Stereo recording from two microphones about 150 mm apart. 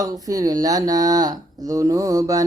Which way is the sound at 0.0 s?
25° right (ahead or behind).